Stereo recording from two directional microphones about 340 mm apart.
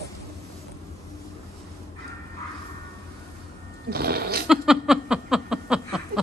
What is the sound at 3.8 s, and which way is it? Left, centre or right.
Goat, right.